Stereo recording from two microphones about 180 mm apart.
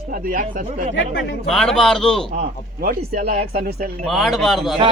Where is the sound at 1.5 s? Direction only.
Centre (ahead or behind).